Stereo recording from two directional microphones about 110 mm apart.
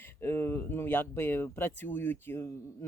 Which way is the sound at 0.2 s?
25° left (ahead or behind).